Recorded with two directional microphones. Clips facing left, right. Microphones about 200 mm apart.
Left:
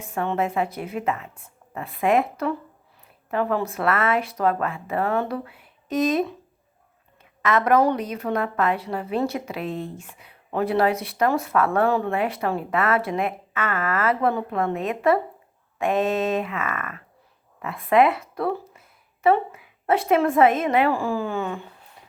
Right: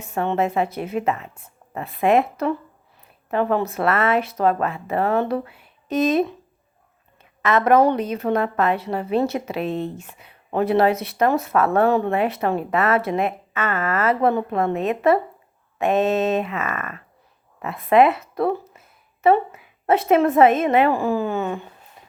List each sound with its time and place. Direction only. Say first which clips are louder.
0.0 s a woman's voice: right 3 dB; 25° right (ahead or behind)
7.4 s a woman's voice: right 3 dB; 25° right (ahead or behind)